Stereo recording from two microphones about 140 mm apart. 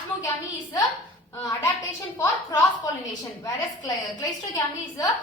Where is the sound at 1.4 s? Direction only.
25° left (ahead or behind).